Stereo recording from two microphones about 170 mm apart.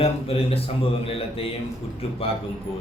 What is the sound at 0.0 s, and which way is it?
Speech, 35° left (ahead or behind).